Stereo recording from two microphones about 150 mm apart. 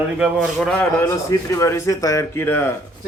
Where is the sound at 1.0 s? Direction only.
20° left (ahead or behind).